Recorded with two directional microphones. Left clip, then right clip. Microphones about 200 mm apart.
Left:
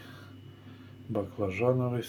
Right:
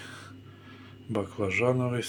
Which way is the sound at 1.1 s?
5° left (ahead or behind).